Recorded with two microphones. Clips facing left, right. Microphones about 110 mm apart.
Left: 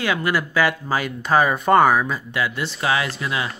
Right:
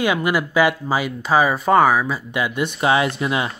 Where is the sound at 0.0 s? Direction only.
15° right (ahead or behind).